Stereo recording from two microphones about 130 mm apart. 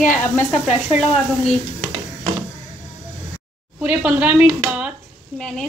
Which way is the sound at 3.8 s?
10° right (ahead or behind).